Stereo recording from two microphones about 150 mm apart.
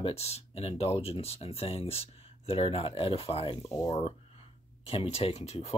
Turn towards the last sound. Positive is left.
turn(degrees=45)  # may be behind; listen again after turning